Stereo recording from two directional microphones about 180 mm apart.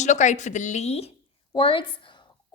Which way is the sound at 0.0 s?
40° left (ahead or behind).